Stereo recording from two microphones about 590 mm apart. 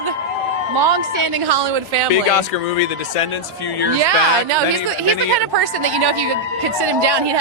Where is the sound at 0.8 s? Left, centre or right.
Right.